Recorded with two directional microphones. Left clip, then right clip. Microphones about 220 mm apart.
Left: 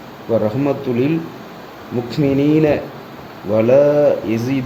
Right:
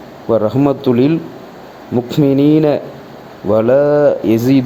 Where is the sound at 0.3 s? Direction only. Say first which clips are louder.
Right 4 dB; 15° right (ahead or behind).